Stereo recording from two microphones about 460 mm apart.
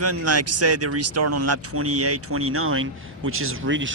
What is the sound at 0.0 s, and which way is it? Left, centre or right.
Speech, right.